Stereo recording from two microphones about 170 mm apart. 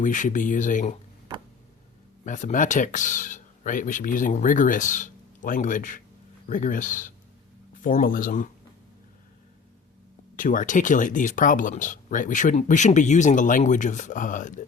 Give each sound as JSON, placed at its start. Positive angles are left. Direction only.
{"t": 0.0, "sound": "speech", "side_deg": 50}
{"t": 2.2, "sound": "speech", "side_deg": 50}
{"t": 10.3, "sound": "speech", "side_deg": 50}